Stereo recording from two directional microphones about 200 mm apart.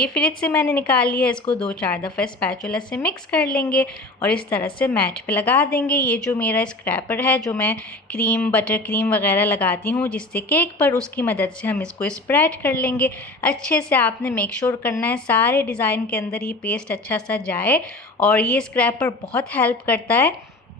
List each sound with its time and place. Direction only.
0.0 s speech: 5° left (ahead or behind)
3.5 s a woman's voice: 50° left (ahead or behind)
3.8 s speech: 5° left (ahead or behind)